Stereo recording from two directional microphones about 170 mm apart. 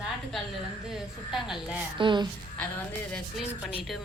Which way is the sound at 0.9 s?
Centre (ahead or behind).